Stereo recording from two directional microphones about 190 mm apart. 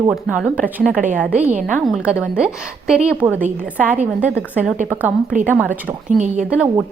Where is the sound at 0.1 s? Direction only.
5° right (ahead or behind).